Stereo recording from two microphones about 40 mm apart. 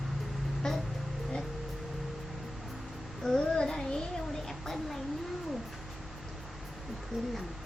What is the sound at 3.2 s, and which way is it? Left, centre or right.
Child singing, centre.